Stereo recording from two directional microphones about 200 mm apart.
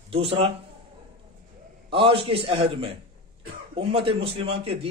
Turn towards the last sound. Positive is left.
turn(degrees=-30)  # may be behind; listen again after turning